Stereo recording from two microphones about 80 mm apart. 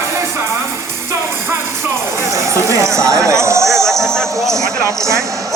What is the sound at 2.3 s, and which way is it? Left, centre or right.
Speech, right.